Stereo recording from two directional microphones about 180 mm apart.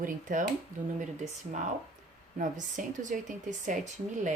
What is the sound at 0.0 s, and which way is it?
A woman's voice, 45° right (ahead or behind).